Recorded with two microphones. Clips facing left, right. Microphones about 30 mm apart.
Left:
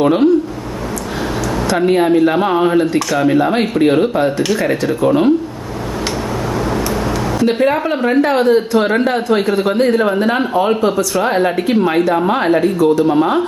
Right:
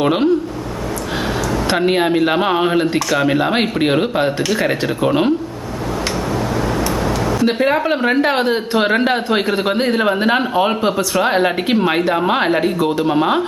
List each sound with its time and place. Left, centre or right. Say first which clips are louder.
0.0 s speech: left 3 dB; right
1.9 s speech: left 5 dB; right
7.4 s speech: left 2 dB; centre